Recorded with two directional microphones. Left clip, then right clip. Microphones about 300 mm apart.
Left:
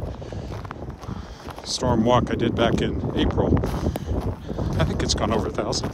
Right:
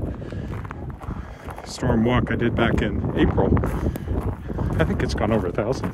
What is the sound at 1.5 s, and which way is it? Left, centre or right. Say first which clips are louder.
Speech: left 2 dB; centre.